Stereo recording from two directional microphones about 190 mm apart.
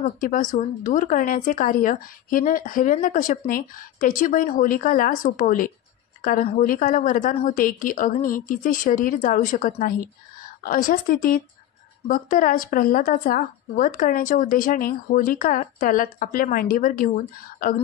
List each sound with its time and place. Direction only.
0.0 s speech: 45° left (ahead or behind)